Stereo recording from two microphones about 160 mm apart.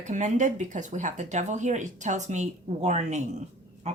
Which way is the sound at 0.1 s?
50° right (ahead or behind).